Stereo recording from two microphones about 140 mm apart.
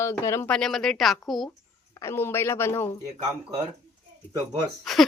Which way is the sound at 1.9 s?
20° left (ahead or behind).